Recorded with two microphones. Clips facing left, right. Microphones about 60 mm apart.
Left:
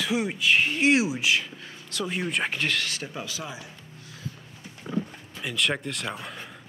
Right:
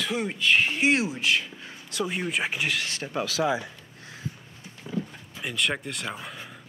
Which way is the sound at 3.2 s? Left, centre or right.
Right.